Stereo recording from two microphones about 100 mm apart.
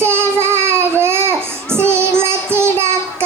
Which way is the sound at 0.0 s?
25° right (ahead or behind).